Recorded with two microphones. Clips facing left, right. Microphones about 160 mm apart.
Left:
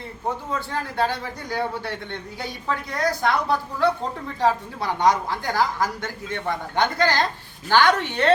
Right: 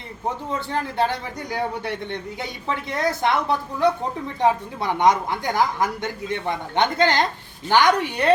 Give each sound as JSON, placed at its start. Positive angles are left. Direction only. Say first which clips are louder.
{"t": 0.7, "sound": "a woman's voice", "louder": "right 2 dB", "side_deg": -20}